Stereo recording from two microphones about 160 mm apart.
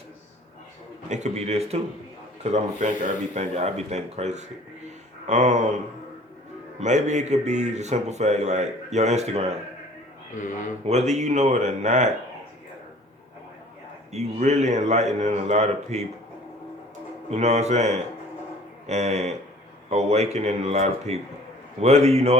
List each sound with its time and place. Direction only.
1.1 s a man's voice: 45° right (ahead or behind)
6.7 s a man's voice: 45° right (ahead or behind)
10.3 s speech: 50° left (ahead or behind)
10.8 s a man's voice: 45° right (ahead or behind)
14.1 s a man's voice: 45° right (ahead or behind)
17.3 s a man's voice: 45° right (ahead or behind)